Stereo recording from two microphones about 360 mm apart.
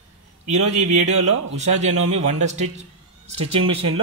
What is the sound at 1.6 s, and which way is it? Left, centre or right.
A man's voice, centre.